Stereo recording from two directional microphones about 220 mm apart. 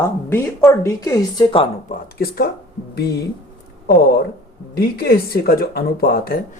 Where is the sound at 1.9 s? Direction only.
45° left (ahead or behind).